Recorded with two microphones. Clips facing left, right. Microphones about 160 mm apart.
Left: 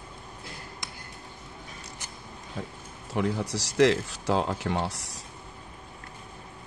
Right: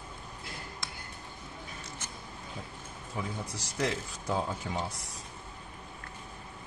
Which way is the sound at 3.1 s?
80° left.